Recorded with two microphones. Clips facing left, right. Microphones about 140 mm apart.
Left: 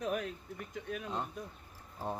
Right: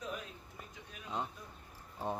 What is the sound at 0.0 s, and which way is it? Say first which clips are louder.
Speech: left 8 dB; 65° left (ahead or behind).